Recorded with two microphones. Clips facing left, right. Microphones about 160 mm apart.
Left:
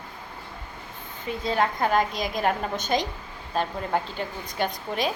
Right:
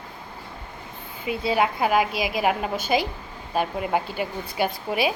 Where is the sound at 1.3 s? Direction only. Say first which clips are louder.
Right 2 dB; 10° right (ahead or behind).